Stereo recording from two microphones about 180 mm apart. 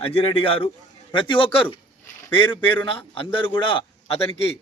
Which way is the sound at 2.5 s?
10° left (ahead or behind).